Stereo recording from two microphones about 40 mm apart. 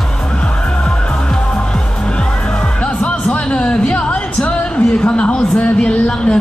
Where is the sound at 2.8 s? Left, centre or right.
Left.